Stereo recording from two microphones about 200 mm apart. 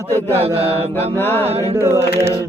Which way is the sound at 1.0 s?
10° left (ahead or behind).